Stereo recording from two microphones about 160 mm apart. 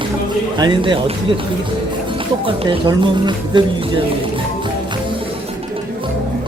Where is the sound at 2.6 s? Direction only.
30° right (ahead or behind).